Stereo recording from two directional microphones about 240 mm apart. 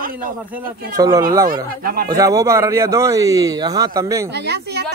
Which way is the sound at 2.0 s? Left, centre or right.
Centre.